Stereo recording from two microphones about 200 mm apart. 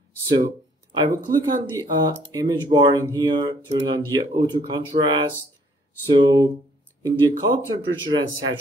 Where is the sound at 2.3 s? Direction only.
20° right (ahead or behind).